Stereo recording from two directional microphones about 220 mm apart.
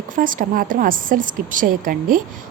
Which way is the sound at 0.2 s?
40° right (ahead or behind).